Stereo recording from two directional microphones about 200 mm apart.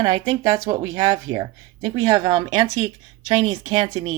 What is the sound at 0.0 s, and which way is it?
Speech, 20° right (ahead or behind).